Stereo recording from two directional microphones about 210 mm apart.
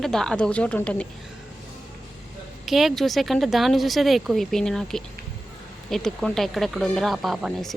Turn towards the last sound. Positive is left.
turn(degrees=0)  # may be behind; listen again after turning